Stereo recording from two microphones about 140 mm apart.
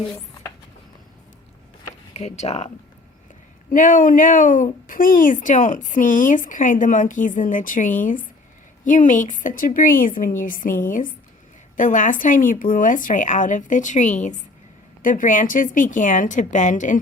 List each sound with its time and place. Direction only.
2.1 s speech: 50° left (ahead or behind)
3.7 s speech: 70° left (ahead or behind)
11.8 s speech: 65° left (ahead or behind)